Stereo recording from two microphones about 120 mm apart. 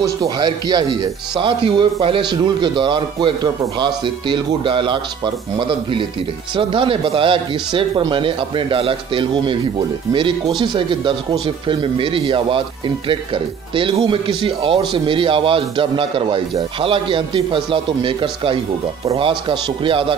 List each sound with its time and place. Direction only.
0.4 s a man's voice: 35° right (ahead or behind)